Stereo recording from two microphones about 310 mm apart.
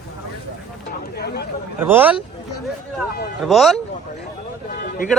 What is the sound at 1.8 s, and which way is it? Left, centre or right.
Speech, centre.